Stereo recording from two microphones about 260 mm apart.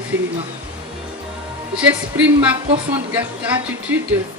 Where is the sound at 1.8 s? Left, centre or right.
Centre.